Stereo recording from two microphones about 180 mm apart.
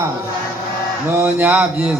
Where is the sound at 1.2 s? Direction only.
10° right (ahead or behind).